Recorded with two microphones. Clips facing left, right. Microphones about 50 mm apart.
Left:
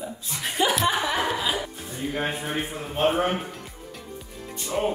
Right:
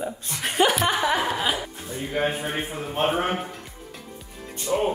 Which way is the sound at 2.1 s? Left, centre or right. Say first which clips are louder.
Right 3 dB; centre.